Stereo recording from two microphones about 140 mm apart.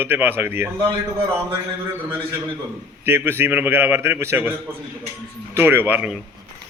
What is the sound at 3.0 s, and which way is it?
A man's voice, 15° right (ahead or behind).